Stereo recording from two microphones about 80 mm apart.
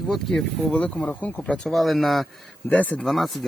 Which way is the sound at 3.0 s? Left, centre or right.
Centre.